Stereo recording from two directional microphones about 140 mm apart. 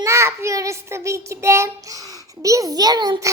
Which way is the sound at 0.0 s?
20° right (ahead or behind).